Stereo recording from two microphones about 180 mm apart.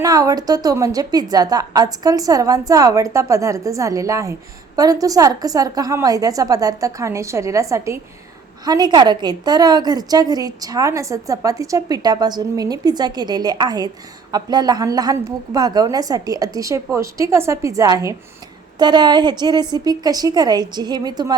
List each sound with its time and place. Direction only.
0.0 s a woman's voice: 20° right (ahead or behind)